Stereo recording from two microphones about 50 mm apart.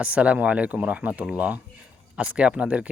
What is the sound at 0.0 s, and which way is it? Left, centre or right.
Speech, right.